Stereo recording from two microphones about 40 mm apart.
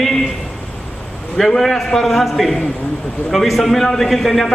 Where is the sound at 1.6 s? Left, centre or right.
Centre.